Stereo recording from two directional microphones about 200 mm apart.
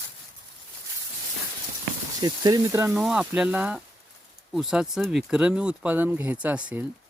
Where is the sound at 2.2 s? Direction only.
20° right (ahead or behind).